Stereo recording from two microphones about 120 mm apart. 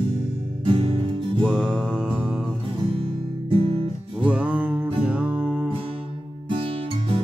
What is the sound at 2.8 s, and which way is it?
Music, 50° right (ahead or behind).